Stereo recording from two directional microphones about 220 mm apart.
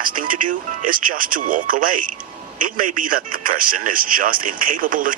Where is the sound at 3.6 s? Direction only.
40° right (ahead or behind).